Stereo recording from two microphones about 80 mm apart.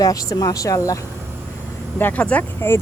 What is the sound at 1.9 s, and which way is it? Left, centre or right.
Speech, left.